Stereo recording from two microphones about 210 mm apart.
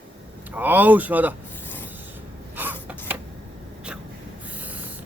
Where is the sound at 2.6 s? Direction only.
10° right (ahead or behind).